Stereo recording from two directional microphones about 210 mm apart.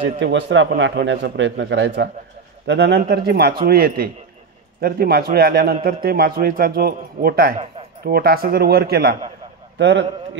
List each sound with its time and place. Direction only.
0.2 s a man's voice: 55° right (ahead or behind)